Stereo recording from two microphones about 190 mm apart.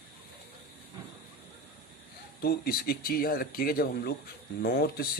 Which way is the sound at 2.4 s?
50° left (ahead or behind).